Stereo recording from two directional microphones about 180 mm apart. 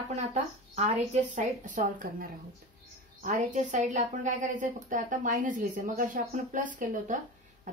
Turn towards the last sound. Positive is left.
turn(degrees=-45)  # may be behind; listen again after turning